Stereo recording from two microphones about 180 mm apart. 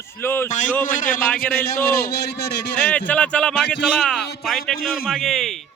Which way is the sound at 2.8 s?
5° left (ahead or behind).